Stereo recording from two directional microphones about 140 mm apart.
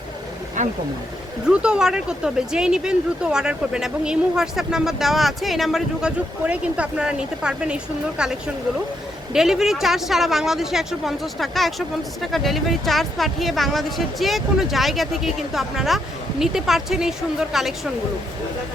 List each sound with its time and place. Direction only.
0.6 s speech: 65° right (ahead or behind)
1.5 s speech: 5° right (ahead or behind)